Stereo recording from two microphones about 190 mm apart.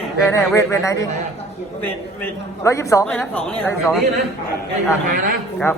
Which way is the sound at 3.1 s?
5° left (ahead or behind).